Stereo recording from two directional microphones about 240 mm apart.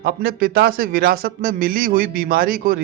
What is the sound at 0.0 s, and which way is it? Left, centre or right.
A man's voice, right.